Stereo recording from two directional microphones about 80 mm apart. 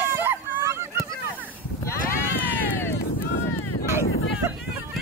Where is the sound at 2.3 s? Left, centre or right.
Left.